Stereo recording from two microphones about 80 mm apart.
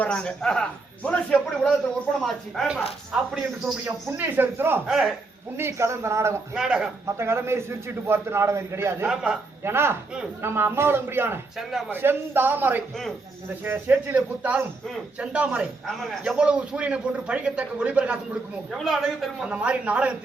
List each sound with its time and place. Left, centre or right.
0.0 s a man's voice: centre
4.0 s a man's voice: right
4.9 s speech: centre
5.5 s a man's voice: right
6.5 s speech: centre
7.2 s a man's voice: right
9.0 s speech: centre
9.6 s a man's voice: right
11.5 s speech: centre
11.9 s a man's voice: right
15.2 s speech: centre
18.7 s speech: centre